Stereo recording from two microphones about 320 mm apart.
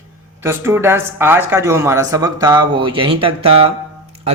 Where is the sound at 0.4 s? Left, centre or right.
Centre.